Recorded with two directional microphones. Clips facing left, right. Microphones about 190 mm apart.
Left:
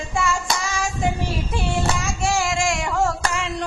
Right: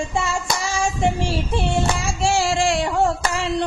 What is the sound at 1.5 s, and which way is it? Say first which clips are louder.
Singing: right 2 dB; 30° right (ahead or behind).